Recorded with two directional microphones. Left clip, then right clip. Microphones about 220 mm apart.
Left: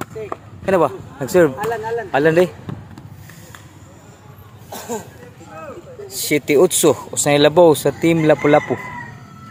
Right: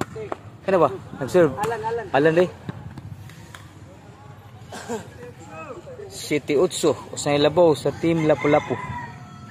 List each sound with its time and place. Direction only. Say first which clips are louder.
0.7 s speech: left 3 dB; 15° left (ahead or behind)
1.7 s speech: left 4 dB; 50° left (ahead or behind)
2.0 s speech: left 4 dB; 15° left (ahead or behind)
4.6 s a sound: left 4 dB; 50° left (ahead or behind)
6.2 s speech: left 7 dB; 15° left (ahead or behind)